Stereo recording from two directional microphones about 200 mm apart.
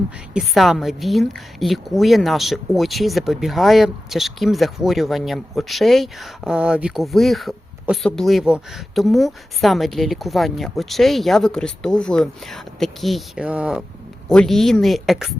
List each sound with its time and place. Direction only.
0.3 s a woman's voice: centre (ahead or behind)